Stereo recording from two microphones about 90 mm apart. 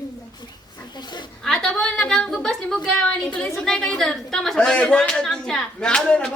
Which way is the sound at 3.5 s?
5° left (ahead or behind).